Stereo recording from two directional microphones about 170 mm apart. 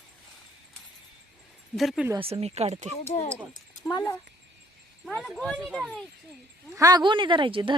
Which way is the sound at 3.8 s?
15° left (ahead or behind).